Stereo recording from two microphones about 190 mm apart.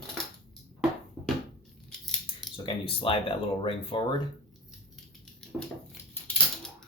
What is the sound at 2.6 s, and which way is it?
Speech, 30° left (ahead or behind).